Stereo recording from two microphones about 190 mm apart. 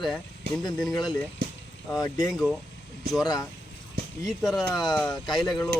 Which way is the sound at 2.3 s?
Centre (ahead or behind).